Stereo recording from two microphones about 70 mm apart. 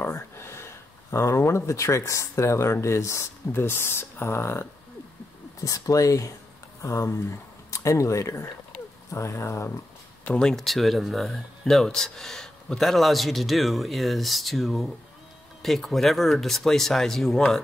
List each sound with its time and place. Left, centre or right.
0.0 s speech: left
3.5 s speech: left
5.6 s speech: left
10.2 s speech: centre